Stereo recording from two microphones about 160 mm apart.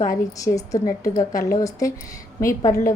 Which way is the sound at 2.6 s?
55° left (ahead or behind).